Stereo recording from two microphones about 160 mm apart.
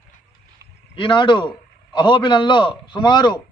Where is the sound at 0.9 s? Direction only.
30° left (ahead or behind).